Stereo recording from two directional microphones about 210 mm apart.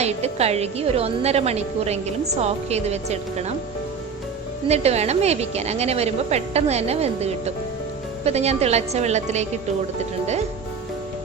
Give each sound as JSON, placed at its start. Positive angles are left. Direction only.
{"t": 0.0, "sound": "a woman's voice", "side_deg": -30}
{"t": 4.7, "sound": "a woman's voice", "side_deg": -30}